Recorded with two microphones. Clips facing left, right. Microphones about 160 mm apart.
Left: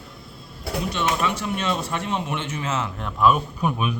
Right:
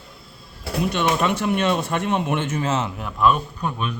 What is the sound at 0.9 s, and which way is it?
Speech, 60° right (ahead or behind).